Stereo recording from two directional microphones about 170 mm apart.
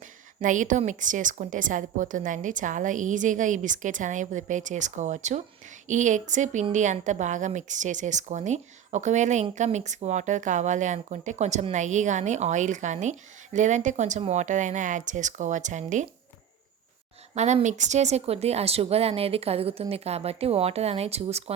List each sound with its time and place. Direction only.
0.3 s a woman's voice: 50° right (ahead or behind)
17.3 s a woman's voice: 45° right (ahead or behind)